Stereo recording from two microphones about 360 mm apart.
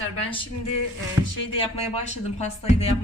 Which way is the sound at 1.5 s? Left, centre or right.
Centre.